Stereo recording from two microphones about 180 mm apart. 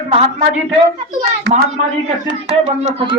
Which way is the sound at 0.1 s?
35° right (ahead or behind).